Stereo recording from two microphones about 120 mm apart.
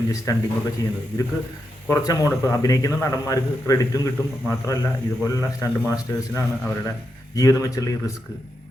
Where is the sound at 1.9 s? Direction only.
30° left (ahead or behind).